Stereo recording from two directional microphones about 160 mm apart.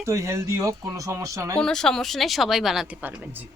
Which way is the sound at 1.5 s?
5° left (ahead or behind).